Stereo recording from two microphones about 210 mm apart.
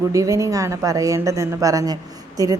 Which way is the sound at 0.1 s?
15° right (ahead or behind).